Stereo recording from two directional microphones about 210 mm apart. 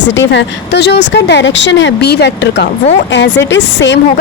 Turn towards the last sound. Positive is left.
turn(degrees=60)  # may be behind; listen again after turning